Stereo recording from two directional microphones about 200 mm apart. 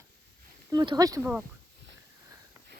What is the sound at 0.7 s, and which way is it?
Speech, 20° right (ahead or behind).